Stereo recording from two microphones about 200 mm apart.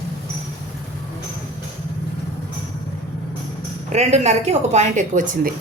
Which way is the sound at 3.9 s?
35° right (ahead or behind).